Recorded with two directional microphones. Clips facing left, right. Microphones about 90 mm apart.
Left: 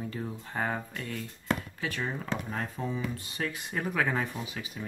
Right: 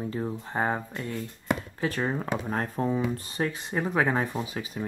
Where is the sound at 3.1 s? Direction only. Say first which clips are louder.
Right 5 dB; 35° right (ahead or behind).